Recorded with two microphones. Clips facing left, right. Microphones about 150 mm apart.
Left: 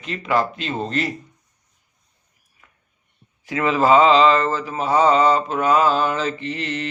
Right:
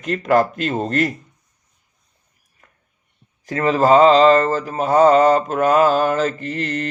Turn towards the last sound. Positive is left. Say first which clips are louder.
# right 3 dB
turn(degrees=-45)  # may be behind; listen again after turning